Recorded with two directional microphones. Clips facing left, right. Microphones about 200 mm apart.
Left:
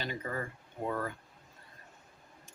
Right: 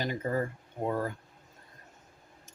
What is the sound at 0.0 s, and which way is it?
Speech, 40° right (ahead or behind).